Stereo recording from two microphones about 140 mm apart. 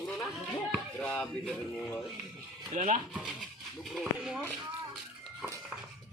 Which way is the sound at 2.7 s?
60° right (ahead or behind).